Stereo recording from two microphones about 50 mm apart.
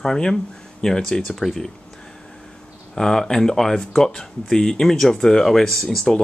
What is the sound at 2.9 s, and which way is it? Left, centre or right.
Speech, centre.